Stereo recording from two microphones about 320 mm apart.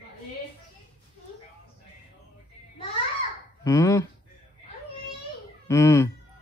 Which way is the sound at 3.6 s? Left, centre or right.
Centre.